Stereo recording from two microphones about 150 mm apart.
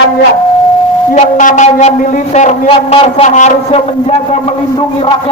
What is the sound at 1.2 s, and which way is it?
A man's voice, 55° left (ahead or behind).